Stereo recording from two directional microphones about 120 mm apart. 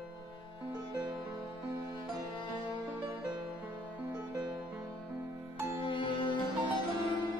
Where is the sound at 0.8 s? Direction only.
35° right (ahead or behind).